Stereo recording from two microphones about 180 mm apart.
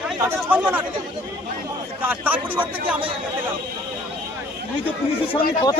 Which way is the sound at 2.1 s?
10° right (ahead or behind).